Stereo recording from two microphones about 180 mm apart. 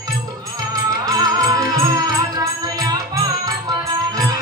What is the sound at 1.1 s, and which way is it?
Music, 20° right (ahead or behind).